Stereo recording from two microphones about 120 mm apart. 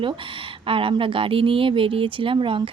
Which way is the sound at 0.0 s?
45° right (ahead or behind).